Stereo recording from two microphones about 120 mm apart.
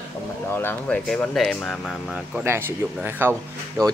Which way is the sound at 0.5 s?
20° left (ahead or behind).